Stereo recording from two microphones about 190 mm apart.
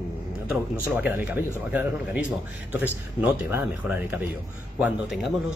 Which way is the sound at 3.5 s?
10° right (ahead or behind).